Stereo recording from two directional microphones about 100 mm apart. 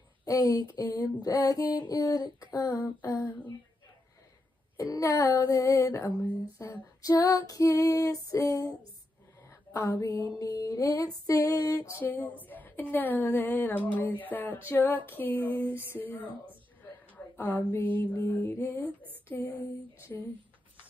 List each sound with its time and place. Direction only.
0.2 s speech: 35° left (ahead or behind)
1.2 s female singing: 35° left (ahead or behind)
4.7 s female singing: 35° left (ahead or behind)
9.7 s a sound: 20° left (ahead or behind)
9.9 s female singing: 40° left (ahead or behind)
12.0 s a woman's voice: 15° left (ahead or behind)
13.9 s a sound: 20° left (ahead or behind)
15.0 s speech: 20° left (ahead or behind)
17.4 s a sound: 20° left (ahead or behind)